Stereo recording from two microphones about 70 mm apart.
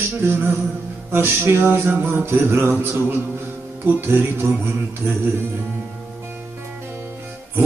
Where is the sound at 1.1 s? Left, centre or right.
Right.